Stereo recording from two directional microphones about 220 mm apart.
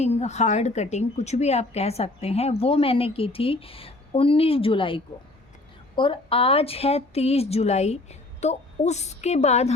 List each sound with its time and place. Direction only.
0.0 s a woman's voice: 30° left (ahead or behind)